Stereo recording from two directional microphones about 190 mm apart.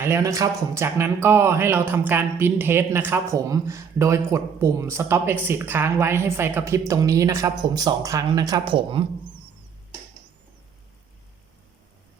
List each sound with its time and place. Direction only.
0.0 s speech: 15° right (ahead or behind)